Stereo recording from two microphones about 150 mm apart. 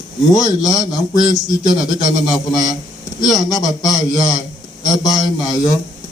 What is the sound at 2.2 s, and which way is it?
A man's voice, 25° left (ahead or behind).